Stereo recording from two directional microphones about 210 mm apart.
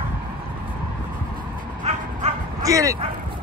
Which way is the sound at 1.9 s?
30° right (ahead or behind).